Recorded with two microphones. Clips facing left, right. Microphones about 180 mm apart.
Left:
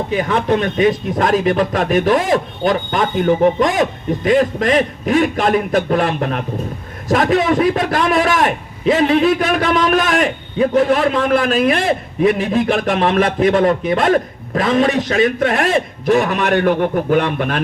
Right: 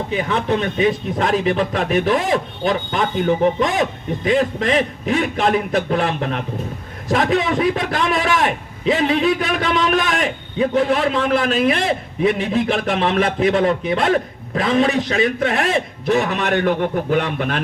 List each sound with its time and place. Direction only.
0.1 s a man's voice: 55° left (ahead or behind)
9.6 s a man's voice: 65° left (ahead or behind); by 17.6 s 50° left (ahead or behind)